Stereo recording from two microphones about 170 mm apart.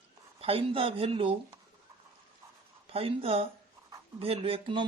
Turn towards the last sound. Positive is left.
turn(degrees=-30)  # may be behind; listen again after turning